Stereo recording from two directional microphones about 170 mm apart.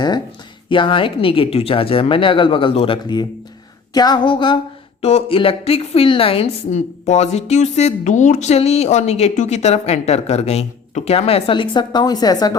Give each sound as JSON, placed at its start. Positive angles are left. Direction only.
{"t": 0.7, "sound": "speech", "side_deg": 30}